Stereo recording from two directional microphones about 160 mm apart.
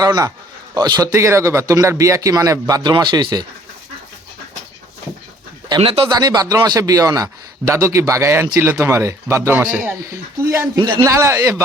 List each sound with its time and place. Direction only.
0.0 s a man's voice: 20° right (ahead or behind)
5.6 s a man's voice: 30° right (ahead or behind)